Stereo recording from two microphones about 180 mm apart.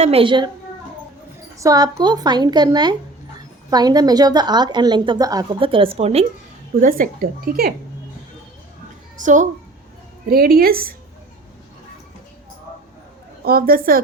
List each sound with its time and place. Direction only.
0.0 s a woman's voice: 30° right (ahead or behind)
1.5 s a woman's voice: 20° right (ahead or behind); by 6.2 s 35° right (ahead or behind)
6.8 s speech: 50° right (ahead or behind)
9.1 s speech: 45° right (ahead or behind)
10.2 s a woman's voice: 55° right (ahead or behind)
13.4 s speech: 55° right (ahead or behind)